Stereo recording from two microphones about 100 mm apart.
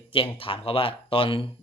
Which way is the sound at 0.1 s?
65° left (ahead or behind).